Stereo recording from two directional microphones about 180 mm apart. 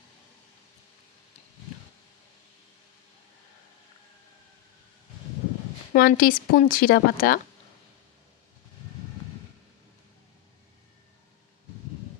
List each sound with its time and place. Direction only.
5.9 s speech: 55° left (ahead or behind)